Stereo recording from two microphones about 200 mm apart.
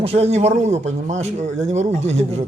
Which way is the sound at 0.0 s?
30° right (ahead or behind).